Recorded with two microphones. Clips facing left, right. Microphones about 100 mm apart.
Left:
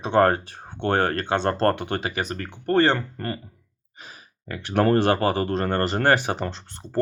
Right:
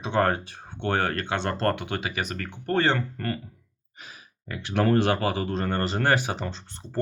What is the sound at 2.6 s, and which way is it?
Speech, 45° left (ahead or behind).